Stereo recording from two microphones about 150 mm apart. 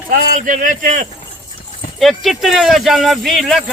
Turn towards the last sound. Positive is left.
turn(degrees=0)  # may be behind; listen again after turning